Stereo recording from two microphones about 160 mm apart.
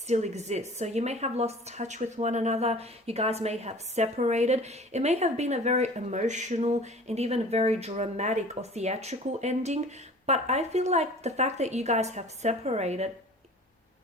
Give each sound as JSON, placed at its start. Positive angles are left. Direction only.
{"t": 0.1, "sound": "a woman's voice", "side_deg": -45}